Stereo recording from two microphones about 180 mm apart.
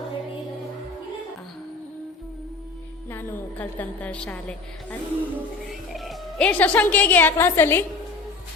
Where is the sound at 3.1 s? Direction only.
10° left (ahead or behind).